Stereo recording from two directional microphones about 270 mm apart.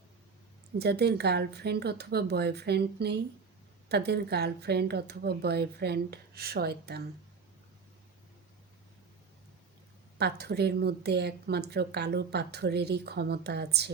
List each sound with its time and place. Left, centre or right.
0.8 s a woman's voice: right
10.2 s a woman's voice: right